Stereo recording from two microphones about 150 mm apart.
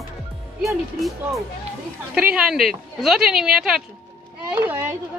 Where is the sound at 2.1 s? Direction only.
5° right (ahead or behind).